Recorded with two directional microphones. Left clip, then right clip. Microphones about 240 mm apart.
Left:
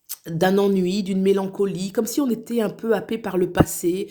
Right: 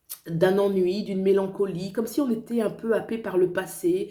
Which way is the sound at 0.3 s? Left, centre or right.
Left.